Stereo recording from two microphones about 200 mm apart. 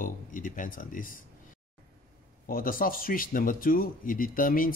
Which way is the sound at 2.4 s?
45° left (ahead or behind).